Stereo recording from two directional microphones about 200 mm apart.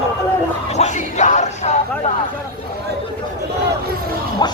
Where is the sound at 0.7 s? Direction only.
35° left (ahead or behind).